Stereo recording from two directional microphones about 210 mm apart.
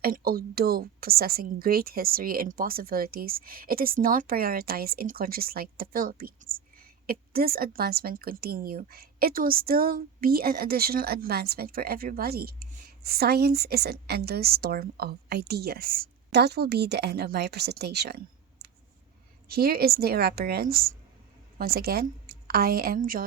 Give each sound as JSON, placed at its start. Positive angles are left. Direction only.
{"t": 0.0, "sound": "a woman's voice", "side_deg": -45}
{"t": 19.5, "sound": "a woman's voice", "side_deg": -45}